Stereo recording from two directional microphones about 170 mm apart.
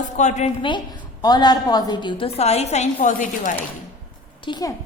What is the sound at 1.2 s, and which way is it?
A woman's voice, 25° left (ahead or behind).